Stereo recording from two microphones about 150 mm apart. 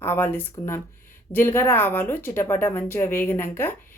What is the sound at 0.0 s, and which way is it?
Speech, 15° left (ahead or behind).